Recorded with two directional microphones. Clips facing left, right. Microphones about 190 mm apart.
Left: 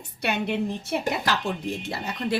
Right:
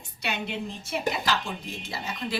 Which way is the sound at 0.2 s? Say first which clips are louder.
Left 6 dB; 55° left (ahead or behind).